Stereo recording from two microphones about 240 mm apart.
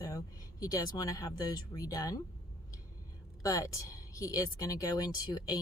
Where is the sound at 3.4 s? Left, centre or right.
Centre.